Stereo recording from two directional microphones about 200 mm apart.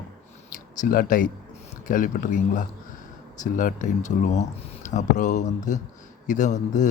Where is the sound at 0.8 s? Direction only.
45° left (ahead or behind).